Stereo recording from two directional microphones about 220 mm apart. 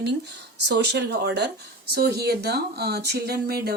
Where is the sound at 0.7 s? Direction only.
50° right (ahead or behind).